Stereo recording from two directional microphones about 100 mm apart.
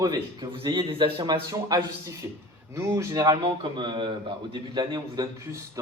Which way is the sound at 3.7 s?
55° right (ahead or behind).